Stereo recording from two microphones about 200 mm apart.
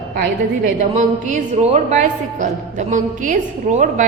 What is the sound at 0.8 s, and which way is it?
A woman's voice, 40° right (ahead or behind).